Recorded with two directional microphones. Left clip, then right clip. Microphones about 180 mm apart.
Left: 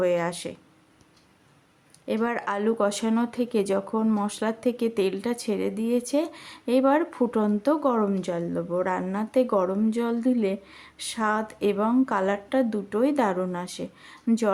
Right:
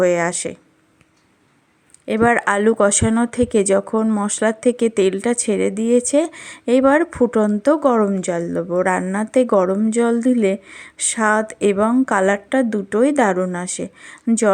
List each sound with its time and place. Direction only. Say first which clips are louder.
0.0 s speech: right 8 dB; 35° right (ahead or behind)
2.0 s speech: right 11 dB; 35° right (ahead or behind)